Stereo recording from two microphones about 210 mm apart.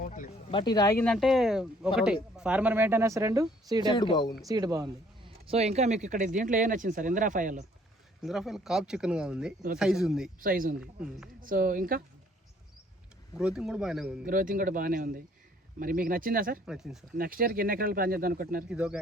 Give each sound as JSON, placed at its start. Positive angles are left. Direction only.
{"t": 0.0, "sound": "a sound", "side_deg": 40}
{"t": 0.5, "sound": "speech", "side_deg": 20}
{"t": 1.0, "sound": "speech", "side_deg": 0}
{"t": 3.9, "sound": "speech", "side_deg": 20}
{"t": 4.4, "sound": "speech", "side_deg": -15}
{"t": 5.5, "sound": "speech", "side_deg": -30}
{"t": 8.2, "sound": "speech", "side_deg": 0}
{"t": 10.4, "sound": "speech", "side_deg": -40}
{"t": 13.3, "sound": "speech", "side_deg": -5}
{"t": 14.3, "sound": "speech", "side_deg": -40}
{"t": 16.6, "sound": "speech", "side_deg": 0}
{"t": 17.2, "sound": "speech", "side_deg": -45}
{"t": 18.7, "sound": "speech", "side_deg": -5}